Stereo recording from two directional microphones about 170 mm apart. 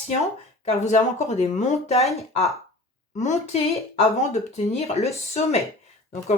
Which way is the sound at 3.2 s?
40° left (ahead or behind).